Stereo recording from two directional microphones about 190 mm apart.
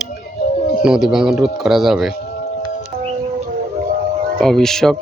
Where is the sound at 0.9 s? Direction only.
Centre (ahead or behind).